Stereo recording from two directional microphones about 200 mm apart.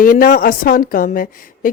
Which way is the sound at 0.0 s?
45° left (ahead or behind).